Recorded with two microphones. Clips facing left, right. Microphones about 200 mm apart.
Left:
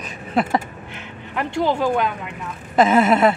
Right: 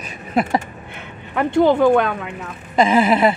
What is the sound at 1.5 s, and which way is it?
Speech, 55° right (ahead or behind).